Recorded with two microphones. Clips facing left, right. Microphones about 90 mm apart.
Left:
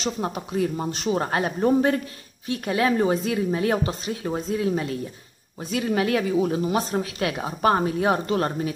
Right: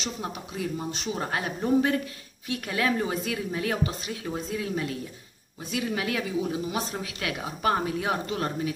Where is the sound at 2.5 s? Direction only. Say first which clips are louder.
Left 5 dB; 30° left (ahead or behind).